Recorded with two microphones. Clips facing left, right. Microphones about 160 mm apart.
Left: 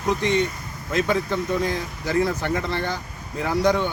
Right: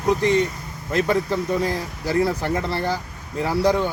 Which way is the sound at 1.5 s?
35° right (ahead or behind).